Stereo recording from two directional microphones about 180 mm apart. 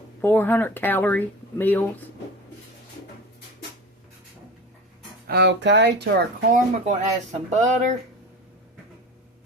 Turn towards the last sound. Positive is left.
turn(degrees=-40)  # may be behind; listen again after turning